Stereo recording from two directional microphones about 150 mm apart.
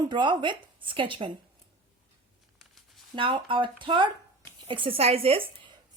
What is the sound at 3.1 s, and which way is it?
Speech, 35° right (ahead or behind).